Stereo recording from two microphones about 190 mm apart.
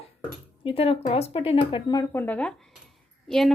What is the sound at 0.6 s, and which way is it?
Speech, 30° left (ahead or behind).